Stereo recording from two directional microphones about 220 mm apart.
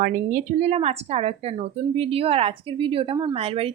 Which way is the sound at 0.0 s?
35° right (ahead or behind).